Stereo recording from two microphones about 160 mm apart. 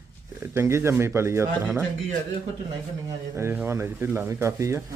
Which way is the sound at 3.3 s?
15° right (ahead or behind).